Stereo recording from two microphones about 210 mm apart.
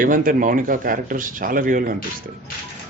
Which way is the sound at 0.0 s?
40° right (ahead or behind).